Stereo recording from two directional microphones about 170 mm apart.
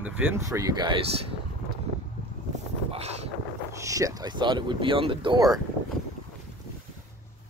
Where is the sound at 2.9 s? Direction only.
40° right (ahead or behind).